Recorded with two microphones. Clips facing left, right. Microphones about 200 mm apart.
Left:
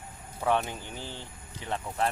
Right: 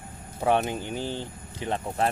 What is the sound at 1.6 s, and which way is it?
Speech, 30° right (ahead or behind).